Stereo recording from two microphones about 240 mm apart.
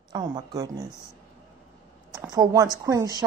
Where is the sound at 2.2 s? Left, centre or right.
Centre.